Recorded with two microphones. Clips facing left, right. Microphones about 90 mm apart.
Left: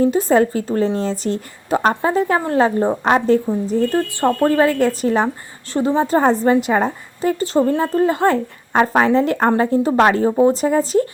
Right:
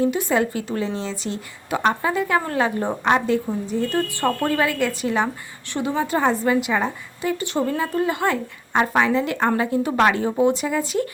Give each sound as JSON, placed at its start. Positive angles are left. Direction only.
{"t": 0.0, "sound": "a woman's voice", "side_deg": 35}